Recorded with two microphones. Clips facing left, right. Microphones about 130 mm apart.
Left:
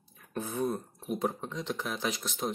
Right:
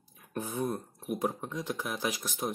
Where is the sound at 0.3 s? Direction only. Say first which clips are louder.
Left 1 dB; 15° right (ahead or behind).